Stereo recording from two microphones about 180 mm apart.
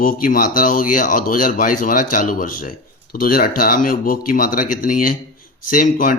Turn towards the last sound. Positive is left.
turn(degrees=50)  # may be behind; listen again after turning